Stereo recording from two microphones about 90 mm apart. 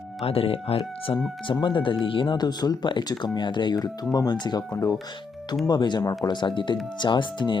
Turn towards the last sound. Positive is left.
turn(degrees=60)  # may be behind; listen again after turning